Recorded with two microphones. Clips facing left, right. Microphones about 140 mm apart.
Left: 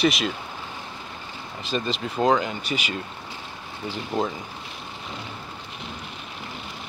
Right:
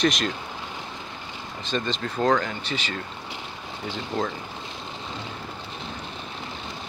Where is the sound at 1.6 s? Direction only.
5° left (ahead or behind).